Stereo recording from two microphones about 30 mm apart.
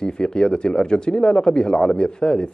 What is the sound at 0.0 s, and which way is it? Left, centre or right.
Speech, left.